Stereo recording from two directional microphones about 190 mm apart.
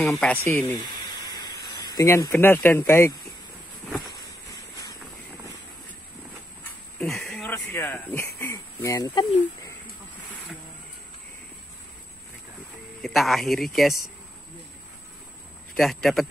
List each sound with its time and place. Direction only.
0.2 s a sound: 10° left (ahead or behind)
2.0 s speech: 15° left (ahead or behind)
7.0 s a sound: 5° left (ahead or behind)
8.4 s speech: 15° left (ahead or behind)
13.0 s speech: centre (ahead or behind)
15.7 s speech: centre (ahead or behind)